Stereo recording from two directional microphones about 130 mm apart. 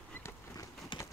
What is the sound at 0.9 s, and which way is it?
Clip-clop, 40° left (ahead or behind).